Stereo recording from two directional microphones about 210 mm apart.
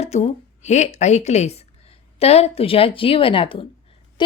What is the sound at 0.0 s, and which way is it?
A woman's voice, 30° left (ahead or behind).